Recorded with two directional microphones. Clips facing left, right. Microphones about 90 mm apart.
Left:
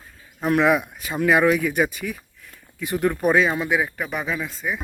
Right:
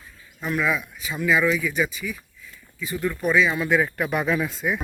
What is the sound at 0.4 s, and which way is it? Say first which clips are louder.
Speech: left 6 dB; 65° left (ahead or behind).